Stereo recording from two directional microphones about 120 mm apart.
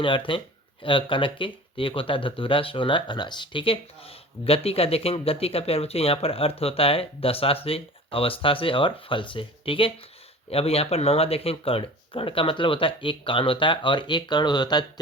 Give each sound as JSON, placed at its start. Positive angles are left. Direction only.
{"t": 0.3, "sound": "speech", "side_deg": 45}